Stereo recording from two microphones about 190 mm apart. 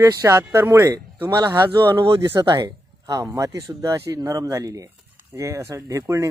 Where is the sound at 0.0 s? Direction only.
15° right (ahead or behind).